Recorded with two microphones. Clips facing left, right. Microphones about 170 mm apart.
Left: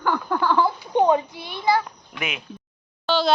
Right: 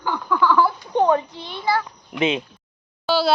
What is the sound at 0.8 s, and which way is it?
A child's voice, 15° left (ahead or behind).